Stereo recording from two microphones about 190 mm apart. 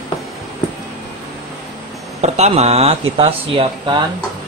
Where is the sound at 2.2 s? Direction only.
35° right (ahead or behind).